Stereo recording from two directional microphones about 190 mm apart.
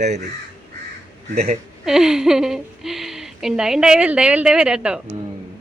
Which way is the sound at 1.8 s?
Centre (ahead or behind).